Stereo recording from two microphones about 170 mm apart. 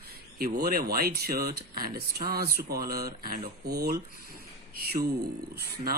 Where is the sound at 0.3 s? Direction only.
60° right (ahead or behind).